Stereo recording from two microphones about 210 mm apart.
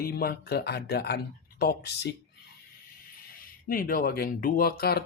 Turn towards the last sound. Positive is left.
turn(degrees=50)  # may be behind; listen again after turning